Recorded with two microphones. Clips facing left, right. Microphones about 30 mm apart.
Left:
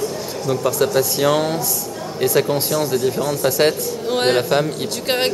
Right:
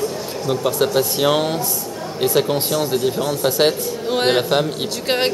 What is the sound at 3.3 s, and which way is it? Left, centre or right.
Speech, centre.